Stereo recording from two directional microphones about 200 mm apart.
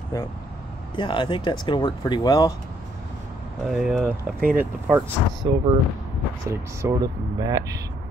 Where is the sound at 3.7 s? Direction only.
Centre (ahead or behind).